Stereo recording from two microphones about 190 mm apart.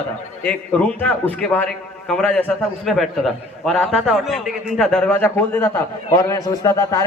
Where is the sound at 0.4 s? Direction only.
10° left (ahead or behind).